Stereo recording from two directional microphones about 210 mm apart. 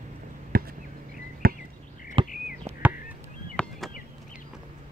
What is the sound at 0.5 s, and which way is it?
Chop, 45° right (ahead or behind).